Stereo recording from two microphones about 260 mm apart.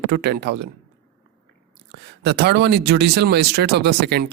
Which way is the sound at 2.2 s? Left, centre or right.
Right.